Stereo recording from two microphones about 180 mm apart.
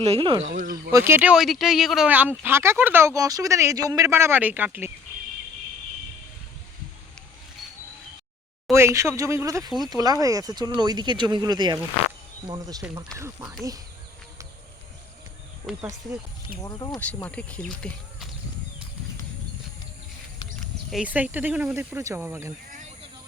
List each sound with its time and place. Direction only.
0.0 s speech: 30° right (ahead or behind)
0.5 s speech: 50° right (ahead or behind)
0.9 s speech: 15° right (ahead or behind)
8.7 s speech: 15° right (ahead or behind)
16.6 s speech: 20° left (ahead or behind)
17.2 s speech: 10° left (ahead or behind)
20.9 s speech: 5° right (ahead or behind)